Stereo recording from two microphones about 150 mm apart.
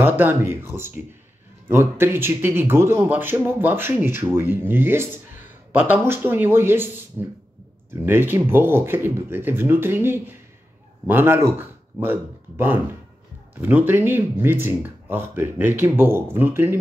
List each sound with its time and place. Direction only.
0.0 s speech: 15° right (ahead or behind)